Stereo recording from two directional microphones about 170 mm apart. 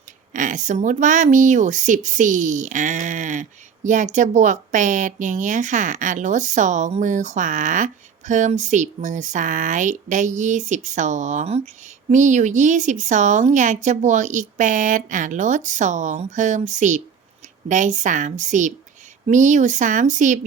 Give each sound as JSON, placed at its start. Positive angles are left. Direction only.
{"t": 0.3, "sound": "a woman's voice", "side_deg": -50}